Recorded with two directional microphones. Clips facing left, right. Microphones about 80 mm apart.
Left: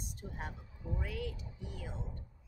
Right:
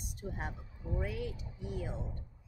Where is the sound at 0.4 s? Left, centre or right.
Centre.